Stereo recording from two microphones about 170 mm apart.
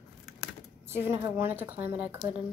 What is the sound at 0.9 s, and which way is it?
A woman's voice, 15° right (ahead or behind).